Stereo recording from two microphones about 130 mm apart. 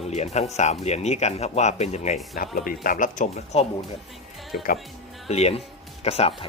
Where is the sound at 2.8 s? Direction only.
90° left; by 3.7 s 60° left (ahead or behind).